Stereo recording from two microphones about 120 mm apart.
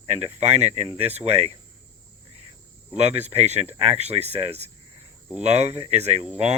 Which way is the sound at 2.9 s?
65° right (ahead or behind).